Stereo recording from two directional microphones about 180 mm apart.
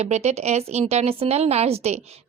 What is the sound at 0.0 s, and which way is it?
A woman's voice, 40° right (ahead or behind).